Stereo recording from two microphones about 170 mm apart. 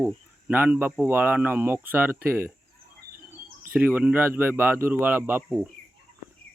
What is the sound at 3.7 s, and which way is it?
Speech, 10° right (ahead or behind).